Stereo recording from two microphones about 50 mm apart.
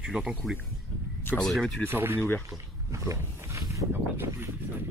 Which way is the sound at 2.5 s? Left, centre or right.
Right.